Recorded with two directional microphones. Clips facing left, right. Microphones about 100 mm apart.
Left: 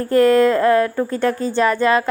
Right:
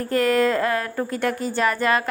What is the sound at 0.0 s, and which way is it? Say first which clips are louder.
Speech: left 6 dB; 30° left (ahead or behind).